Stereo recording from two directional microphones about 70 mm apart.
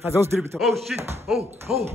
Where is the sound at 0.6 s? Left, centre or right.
Centre.